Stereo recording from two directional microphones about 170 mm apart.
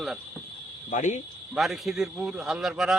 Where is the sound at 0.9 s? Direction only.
45° left (ahead or behind).